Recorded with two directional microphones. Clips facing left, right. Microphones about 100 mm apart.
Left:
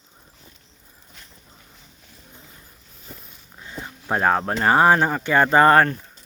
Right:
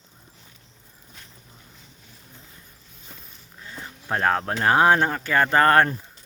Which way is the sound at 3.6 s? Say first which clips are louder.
Left 3 dB; 20° left (ahead or behind).